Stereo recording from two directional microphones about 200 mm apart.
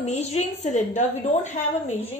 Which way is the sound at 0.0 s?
35° left (ahead or behind).